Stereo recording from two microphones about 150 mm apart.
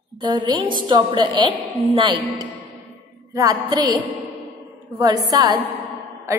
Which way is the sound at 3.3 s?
25° right (ahead or behind).